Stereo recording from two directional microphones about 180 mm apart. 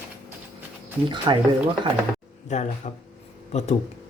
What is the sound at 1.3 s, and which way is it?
Speech, 25° right (ahead or behind).